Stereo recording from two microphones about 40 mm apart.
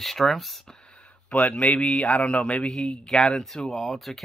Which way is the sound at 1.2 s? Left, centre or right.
Left.